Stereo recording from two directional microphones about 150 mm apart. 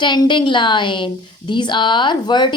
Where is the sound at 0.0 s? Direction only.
30° left (ahead or behind).